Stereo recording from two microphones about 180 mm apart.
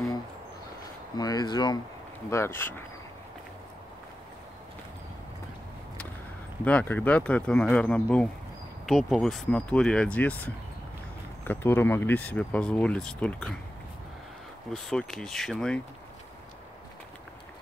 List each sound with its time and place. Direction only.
1.1 s speech: 20° left (ahead or behind)
6.6 s speech: 10° left (ahead or behind)
14.7 s speech: 5° left (ahead or behind)